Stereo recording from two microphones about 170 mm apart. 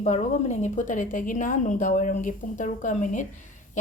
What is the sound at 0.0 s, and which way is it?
A woman's voice, 45° left (ahead or behind).